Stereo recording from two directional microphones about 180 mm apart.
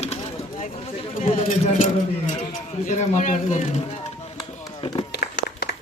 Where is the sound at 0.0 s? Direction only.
35° left (ahead or behind).